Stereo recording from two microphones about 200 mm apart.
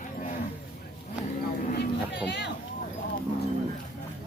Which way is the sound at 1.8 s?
60° left (ahead or behind).